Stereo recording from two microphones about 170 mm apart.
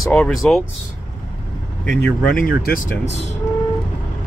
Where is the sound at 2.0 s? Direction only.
60° left (ahead or behind).